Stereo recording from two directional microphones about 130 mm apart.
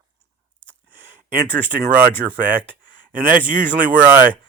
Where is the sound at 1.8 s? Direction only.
10° right (ahead or behind).